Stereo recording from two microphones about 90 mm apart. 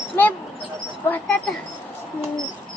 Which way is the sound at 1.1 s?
15° left (ahead or behind).